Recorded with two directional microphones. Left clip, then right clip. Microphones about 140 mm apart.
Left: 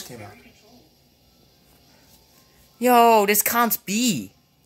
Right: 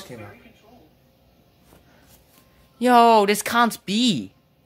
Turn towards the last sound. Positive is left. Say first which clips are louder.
# right 2 dB
turn(degrees=0)  # may be behind; listen again after turning